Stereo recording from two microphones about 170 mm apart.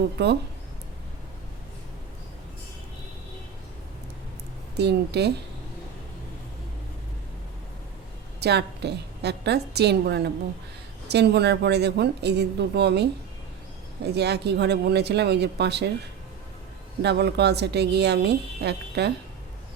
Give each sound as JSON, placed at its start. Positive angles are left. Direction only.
{"t": 0.2, "sound": "speech", "side_deg": -85}
{"t": 4.8, "sound": "speech", "side_deg": -80}
{"t": 8.4, "sound": "speech", "side_deg": -80}
{"t": 14.2, "sound": "speech", "side_deg": -75}
{"t": 17.0, "sound": "speech", "side_deg": -80}